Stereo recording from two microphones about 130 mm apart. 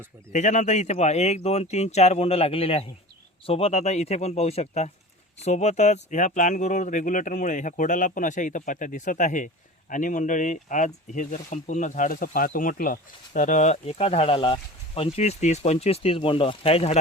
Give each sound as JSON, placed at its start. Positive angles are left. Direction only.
{"t": 0.3, "sound": "speech", "side_deg": 65}
{"t": 9.9, "sound": "speech", "side_deg": 85}